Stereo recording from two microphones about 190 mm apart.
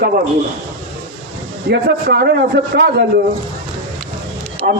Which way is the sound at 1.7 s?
55° right (ahead or behind).